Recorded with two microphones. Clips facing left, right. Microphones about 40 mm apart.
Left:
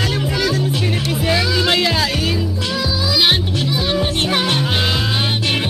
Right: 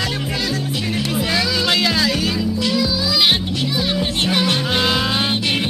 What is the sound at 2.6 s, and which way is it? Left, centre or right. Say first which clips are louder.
Music: right 4 dB; left.